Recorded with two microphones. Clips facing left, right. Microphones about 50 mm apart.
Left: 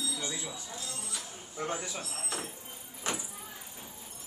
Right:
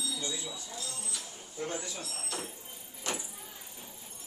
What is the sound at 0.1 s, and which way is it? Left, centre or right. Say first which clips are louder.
A man's voice: even; left.